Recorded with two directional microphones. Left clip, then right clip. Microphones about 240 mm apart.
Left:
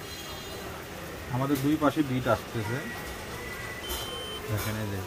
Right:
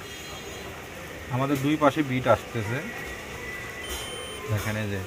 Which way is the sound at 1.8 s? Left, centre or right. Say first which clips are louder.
Right 4 dB; right.